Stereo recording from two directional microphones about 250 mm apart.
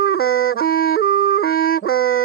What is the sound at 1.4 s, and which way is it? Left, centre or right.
Music, left.